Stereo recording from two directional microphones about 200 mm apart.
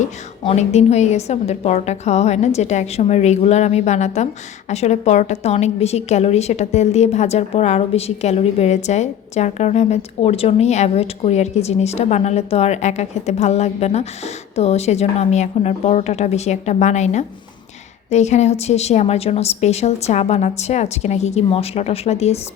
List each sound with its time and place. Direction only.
0.0 s a woman's voice: 35° left (ahead or behind)